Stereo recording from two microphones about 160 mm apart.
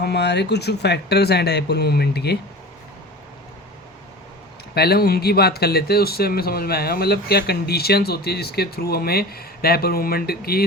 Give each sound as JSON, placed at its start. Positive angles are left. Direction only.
{"t": 0.0, "sound": "speech", "side_deg": 90}
{"t": 4.7, "sound": "speech", "side_deg": 80}